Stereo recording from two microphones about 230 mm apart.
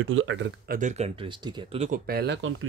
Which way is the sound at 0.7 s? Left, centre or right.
Right.